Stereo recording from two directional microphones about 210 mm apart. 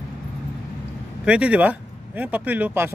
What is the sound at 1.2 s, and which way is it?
Speech, 5° right (ahead or behind).